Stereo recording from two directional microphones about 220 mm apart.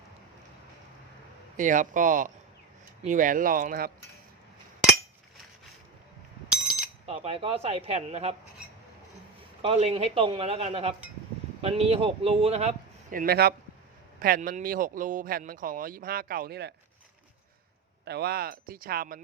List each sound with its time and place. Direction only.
1.5 s speech: 35° right (ahead or behind)
6.5 s a sound: centre (ahead or behind)
7.0 s a man's voice: 30° right (ahead or behind)
9.6 s a man's voice: 25° right (ahead or behind); by 16.7 s 50° right (ahead or behind)
18.0 s speech: 50° right (ahead or behind)